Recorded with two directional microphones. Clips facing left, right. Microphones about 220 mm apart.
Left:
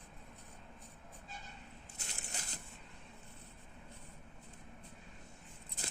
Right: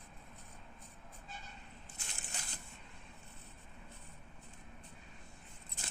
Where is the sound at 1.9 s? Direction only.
40° left (ahead or behind).